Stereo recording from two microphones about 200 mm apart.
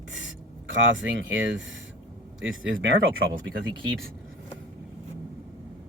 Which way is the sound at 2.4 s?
70° right (ahead or behind).